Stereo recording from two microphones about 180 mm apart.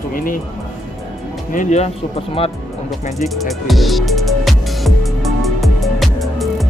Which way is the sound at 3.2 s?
Centre (ahead or behind).